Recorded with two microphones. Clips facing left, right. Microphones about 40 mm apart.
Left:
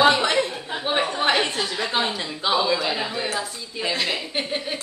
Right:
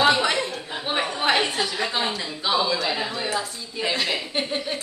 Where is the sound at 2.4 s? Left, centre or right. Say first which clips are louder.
Left 1 dB; left.